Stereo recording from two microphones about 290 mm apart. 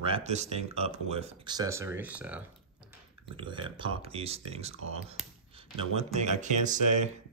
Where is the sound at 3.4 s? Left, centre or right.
Centre.